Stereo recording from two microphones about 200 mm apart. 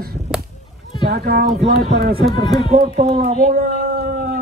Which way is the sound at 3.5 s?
50° right (ahead or behind).